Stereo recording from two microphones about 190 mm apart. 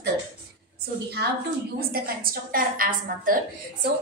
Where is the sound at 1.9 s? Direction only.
50° right (ahead or behind).